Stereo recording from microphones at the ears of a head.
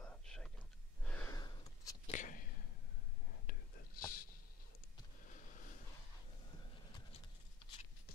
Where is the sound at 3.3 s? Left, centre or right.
Left.